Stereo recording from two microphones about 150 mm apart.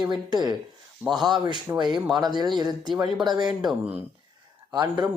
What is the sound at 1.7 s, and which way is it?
Speech, 15° right (ahead or behind).